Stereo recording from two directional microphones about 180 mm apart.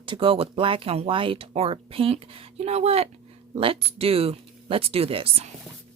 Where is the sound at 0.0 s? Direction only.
30° right (ahead or behind).